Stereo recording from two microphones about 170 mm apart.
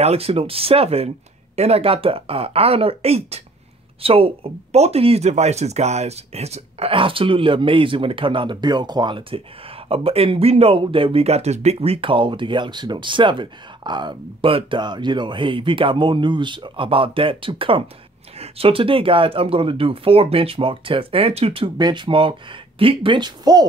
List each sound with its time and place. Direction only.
0.0 s speech: 35° right (ahead or behind)